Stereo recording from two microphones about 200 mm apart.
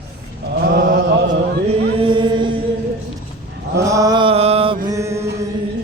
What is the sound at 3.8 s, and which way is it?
Mantra, 15° right (ahead or behind).